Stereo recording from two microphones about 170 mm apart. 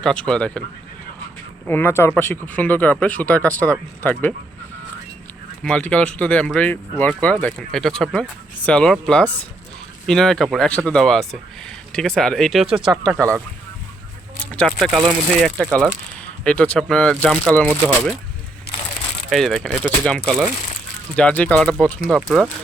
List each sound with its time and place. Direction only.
0.0 s speech: 5° left (ahead or behind)
1.6 s speech: 10° left (ahead or behind)
5.6 s speech: 5° left (ahead or behind)
13.1 s speech: 20° right (ahead or behind)
14.5 s speech: 5° left (ahead or behind)
19.3 s speech: centre (ahead or behind)